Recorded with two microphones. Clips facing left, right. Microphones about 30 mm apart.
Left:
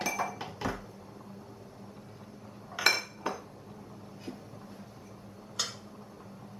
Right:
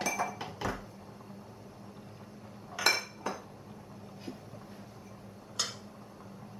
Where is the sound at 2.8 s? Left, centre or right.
Centre.